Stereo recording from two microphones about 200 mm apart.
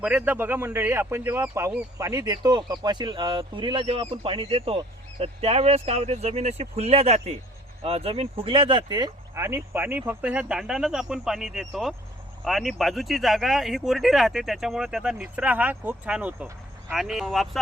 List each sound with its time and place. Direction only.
0.0 s speech: 5° right (ahead or behind)